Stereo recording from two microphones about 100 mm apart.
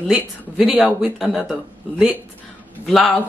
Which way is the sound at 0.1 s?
Centre (ahead or behind).